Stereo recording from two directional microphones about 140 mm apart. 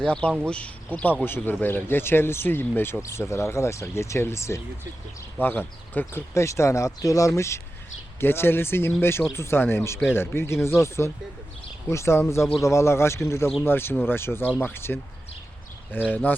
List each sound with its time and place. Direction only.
0.0 s speech: 10° left (ahead or behind)